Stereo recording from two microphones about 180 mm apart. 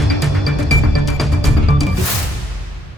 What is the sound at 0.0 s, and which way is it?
Music, centre (ahead or behind).